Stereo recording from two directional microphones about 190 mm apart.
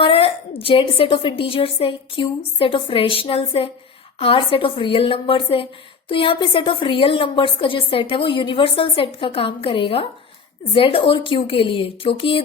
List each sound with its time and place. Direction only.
0.0 s a woman's voice: 30° left (ahead or behind)